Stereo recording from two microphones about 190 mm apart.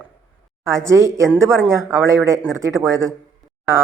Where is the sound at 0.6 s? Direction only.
15° right (ahead or behind).